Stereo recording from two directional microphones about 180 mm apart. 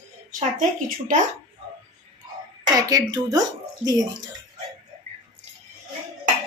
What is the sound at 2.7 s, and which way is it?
Speech, 20° right (ahead or behind).